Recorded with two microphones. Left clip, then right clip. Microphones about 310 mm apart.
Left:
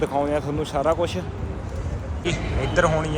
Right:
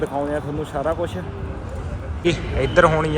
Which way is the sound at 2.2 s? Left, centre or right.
Centre.